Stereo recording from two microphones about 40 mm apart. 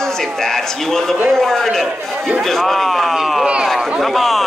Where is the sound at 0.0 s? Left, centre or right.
Centre.